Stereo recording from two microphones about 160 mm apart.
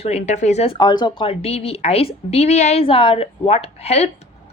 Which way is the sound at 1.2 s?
40° left (ahead or behind).